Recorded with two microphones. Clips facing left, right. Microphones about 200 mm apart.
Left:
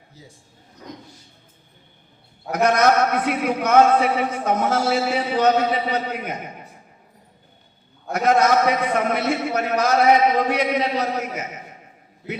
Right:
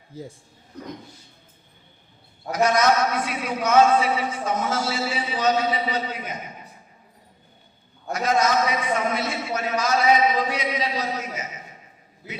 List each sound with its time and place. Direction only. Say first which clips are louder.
0.1 s speech: right 11 dB; 55° right (ahead or behind)
2.5 s a man's voice: left 2 dB; 60° left (ahead or behind)
8.1 s a man's voice: left 4 dB; 60° left (ahead or behind)